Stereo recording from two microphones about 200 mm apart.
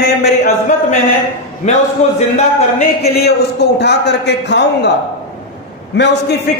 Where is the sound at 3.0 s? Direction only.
55° left (ahead or behind).